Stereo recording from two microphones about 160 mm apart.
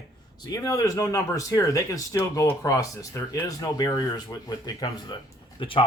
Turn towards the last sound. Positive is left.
turn(degrees=35)  # may be behind; listen again after turning